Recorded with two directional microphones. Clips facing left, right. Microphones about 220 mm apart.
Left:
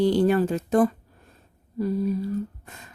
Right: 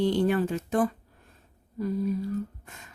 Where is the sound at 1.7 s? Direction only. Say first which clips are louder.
Left 3 dB; 35° left (ahead or behind).